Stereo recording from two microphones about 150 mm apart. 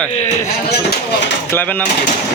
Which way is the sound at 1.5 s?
10° left (ahead or behind).